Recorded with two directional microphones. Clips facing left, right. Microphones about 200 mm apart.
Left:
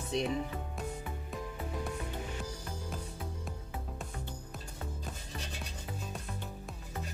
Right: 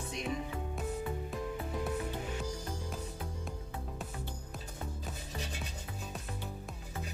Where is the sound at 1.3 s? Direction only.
Centre (ahead or behind).